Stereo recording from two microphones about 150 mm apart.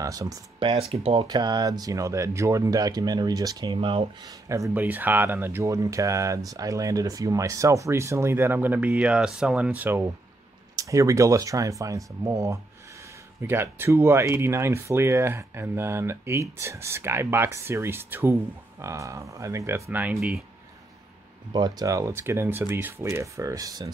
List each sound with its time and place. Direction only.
0.0 s speech: 20° right (ahead or behind); by 1.2 s 40° right (ahead or behind)
1.2 s speech: 30° right (ahead or behind)
4.3 s speech: 20° right (ahead or behind)
21.5 s speech: 25° right (ahead or behind)